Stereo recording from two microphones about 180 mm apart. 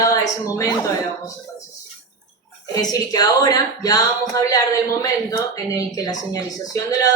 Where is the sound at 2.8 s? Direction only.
20° left (ahead or behind).